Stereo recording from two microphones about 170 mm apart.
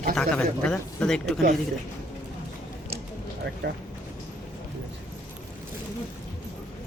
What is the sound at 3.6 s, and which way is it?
Speech, 80° right.